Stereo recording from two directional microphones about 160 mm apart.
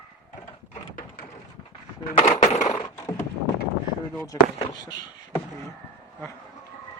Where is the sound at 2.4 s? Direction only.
45° left (ahead or behind).